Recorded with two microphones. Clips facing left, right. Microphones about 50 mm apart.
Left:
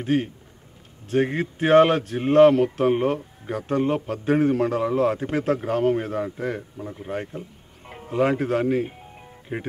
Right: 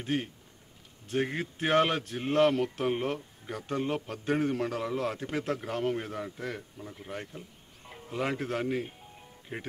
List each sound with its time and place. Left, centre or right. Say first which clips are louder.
0.0 s a man's voice: left 9 dB; centre
3.2 s speech: left 9 dB; left
3.6 s a man's voice: left 9 dB; centre